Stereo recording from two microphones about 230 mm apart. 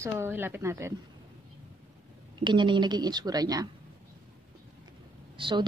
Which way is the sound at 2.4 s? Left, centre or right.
Centre.